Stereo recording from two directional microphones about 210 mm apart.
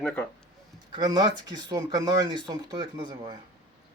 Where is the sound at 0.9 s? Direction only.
20° right (ahead or behind).